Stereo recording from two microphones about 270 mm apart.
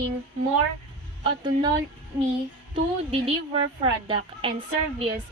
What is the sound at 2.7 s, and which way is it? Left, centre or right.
A woman's voice, right.